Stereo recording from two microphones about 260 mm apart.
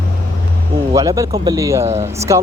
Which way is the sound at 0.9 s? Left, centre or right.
Centre.